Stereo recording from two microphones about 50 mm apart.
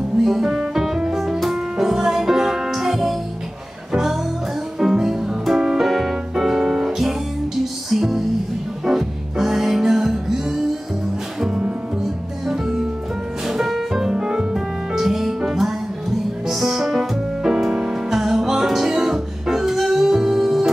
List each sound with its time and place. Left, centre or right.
0.2 s music: centre
13.5 s music: centre